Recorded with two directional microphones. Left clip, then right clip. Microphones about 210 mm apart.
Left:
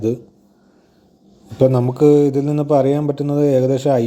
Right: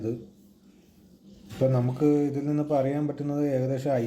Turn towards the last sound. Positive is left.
turn(degrees=35)  # may be behind; listen again after turning